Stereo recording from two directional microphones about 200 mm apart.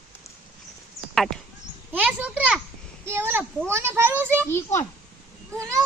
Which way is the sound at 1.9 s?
5° right (ahead or behind).